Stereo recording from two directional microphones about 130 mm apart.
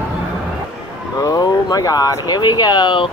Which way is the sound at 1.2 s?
30° left (ahead or behind).